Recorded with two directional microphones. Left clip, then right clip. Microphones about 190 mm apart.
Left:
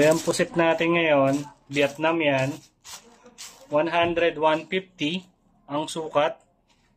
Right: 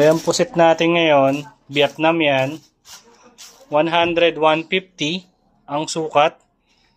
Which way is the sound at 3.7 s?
35° right (ahead or behind).